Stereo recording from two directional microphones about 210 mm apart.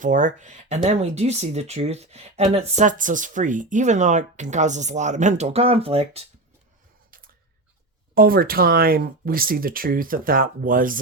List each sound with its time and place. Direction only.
0.0 s speech: 35° right (ahead or behind)
8.1 s speech: 45° right (ahead or behind)